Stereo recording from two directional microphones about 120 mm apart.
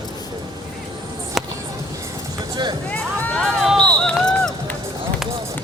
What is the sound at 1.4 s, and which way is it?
Music, centre (ahead or behind).